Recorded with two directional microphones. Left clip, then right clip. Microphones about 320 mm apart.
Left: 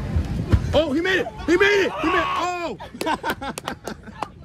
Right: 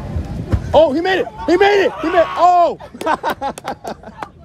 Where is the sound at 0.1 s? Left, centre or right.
Centre.